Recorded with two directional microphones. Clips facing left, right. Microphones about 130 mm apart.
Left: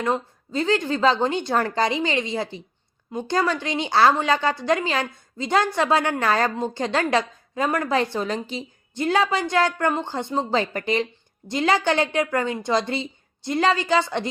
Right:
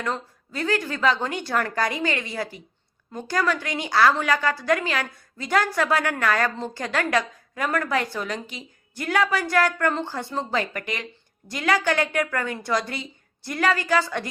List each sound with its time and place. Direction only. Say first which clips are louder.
0.0 s a woman's voice: left 5 dB; 25° left (ahead or behind)